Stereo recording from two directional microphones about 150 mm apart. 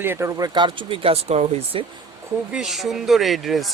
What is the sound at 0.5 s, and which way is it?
Speech, 30° right (ahead or behind).